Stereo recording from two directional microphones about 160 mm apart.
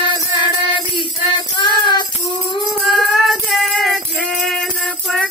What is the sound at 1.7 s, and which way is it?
Music, 25° left (ahead or behind).